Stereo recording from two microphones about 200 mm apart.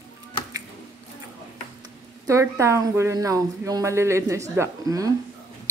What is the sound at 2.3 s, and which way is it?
A woman's voice, 15° right (ahead or behind).